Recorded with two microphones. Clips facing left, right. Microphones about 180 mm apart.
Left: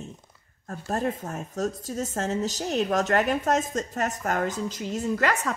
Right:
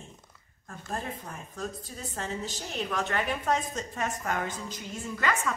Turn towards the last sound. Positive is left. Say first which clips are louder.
# left 5 dB
turn(degrees=40)  # may be behind; listen again after turning